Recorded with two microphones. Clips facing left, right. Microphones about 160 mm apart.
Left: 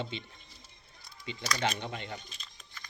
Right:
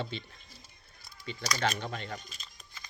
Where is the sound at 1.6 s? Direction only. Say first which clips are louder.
Right 2 dB; 20° left (ahead or behind).